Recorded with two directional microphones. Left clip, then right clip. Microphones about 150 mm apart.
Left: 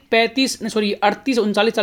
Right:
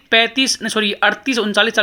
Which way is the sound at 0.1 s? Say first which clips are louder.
Right 3 dB; 15° left (ahead or behind).